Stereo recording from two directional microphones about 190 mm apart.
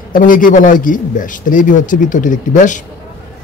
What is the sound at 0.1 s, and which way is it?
A man's voice, 45° left (ahead or behind).